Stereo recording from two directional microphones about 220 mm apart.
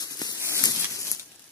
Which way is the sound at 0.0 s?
15° left (ahead or behind).